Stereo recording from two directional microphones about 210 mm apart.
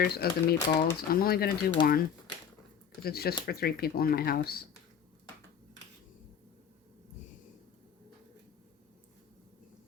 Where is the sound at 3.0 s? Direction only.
45° left (ahead or behind).